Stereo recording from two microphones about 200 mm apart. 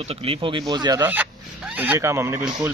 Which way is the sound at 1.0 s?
10° right (ahead or behind).